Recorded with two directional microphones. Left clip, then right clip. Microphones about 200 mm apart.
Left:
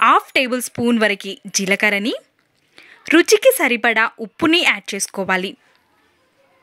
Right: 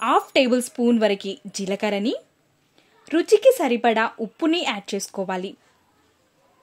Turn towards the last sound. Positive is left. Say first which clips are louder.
# left 7 dB
turn(degrees=15)  # may be behind; listen again after turning